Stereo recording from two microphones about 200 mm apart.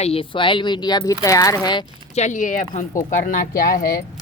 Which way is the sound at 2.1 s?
40° left (ahead or behind).